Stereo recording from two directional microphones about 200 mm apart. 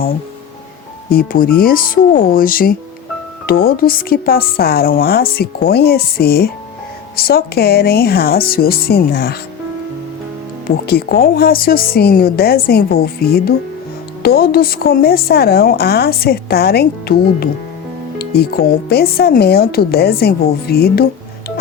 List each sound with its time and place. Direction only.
1.1 s a woman's voice: 45° left (ahead or behind)
10.8 s a woman's voice: 45° left (ahead or behind)